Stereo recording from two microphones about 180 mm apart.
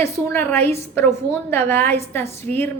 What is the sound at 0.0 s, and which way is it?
A woman's voice, 15° left (ahead or behind).